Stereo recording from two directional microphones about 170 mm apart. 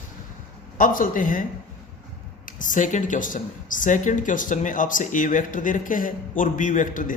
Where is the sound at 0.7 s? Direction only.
50° left (ahead or behind).